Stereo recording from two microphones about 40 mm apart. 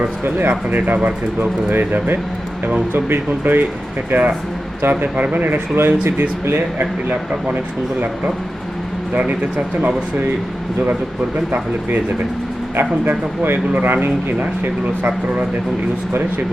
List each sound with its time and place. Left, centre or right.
0.0 s speech: right
4.8 s speech: right
5.7 s speech: right
7.1 s speech: right
9.1 s speech: right
13.1 s speech: right